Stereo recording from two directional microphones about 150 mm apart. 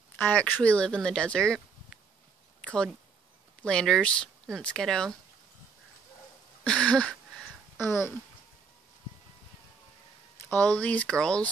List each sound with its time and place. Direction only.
0.2 s speech: 10° left (ahead or behind)
2.6 s a sound: 5° left (ahead or behind)
3.6 s speech: 5° left (ahead or behind)
6.6 s a sound: 5° left (ahead or behind)
7.8 s speech: 15° left (ahead or behind)
10.4 s speech: 10° left (ahead or behind)